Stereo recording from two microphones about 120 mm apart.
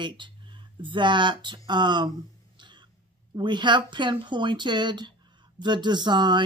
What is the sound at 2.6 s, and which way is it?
Cough, 40° right (ahead or behind).